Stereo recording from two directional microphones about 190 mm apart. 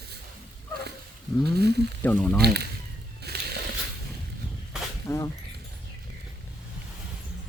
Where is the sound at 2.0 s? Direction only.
10° left (ahead or behind).